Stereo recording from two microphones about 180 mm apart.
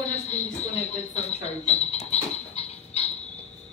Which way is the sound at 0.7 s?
35° left (ahead or behind).